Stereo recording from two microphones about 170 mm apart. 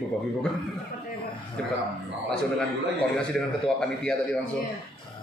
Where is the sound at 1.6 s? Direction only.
5° left (ahead or behind).